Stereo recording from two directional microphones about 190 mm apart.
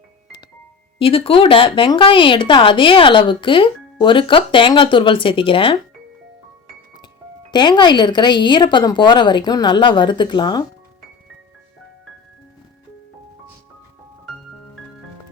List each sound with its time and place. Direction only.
0.9 s speech: 30° left (ahead or behind)
7.5 s speech: 25° left (ahead or behind)